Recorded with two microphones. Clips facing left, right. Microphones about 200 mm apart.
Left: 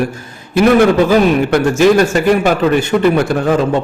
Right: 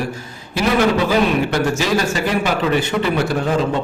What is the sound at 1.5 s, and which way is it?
A man's voice, 55° left (ahead or behind).